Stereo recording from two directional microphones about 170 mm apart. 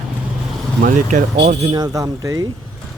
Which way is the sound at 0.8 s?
45° right (ahead or behind).